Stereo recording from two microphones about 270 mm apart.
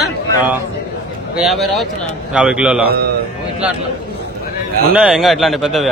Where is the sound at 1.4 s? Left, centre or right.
Centre.